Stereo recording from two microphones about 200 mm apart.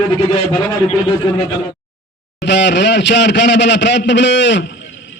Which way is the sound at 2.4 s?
60° left (ahead or behind).